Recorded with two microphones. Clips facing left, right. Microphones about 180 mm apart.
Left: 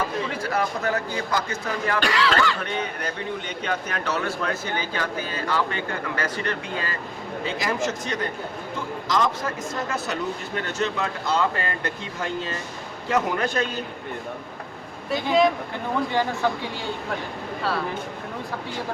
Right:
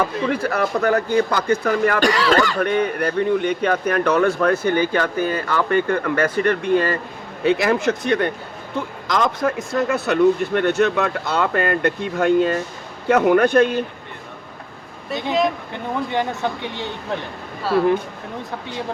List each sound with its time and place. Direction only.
0.3 s speech: 60° right (ahead or behind)
2.0 s speech: 40° right (ahead or behind); by 13.8 s 60° right (ahead or behind)
15.1 s speech: centre (ahead or behind)
16.1 s speech: 20° right (ahead or behind)